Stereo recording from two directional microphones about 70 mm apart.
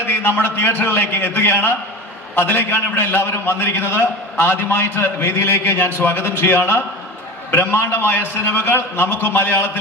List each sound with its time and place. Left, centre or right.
0.0 s a man's voice: left